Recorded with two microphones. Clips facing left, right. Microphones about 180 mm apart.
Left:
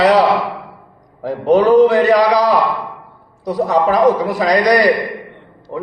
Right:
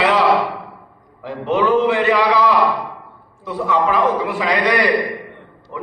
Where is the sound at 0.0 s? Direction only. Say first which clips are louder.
Left 5 dB; 40° left (ahead or behind).